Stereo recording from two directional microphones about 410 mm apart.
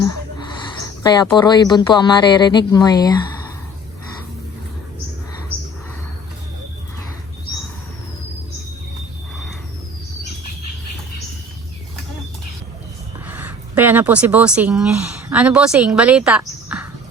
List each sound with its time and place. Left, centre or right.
1.0 s speech: centre
13.2 s speech: centre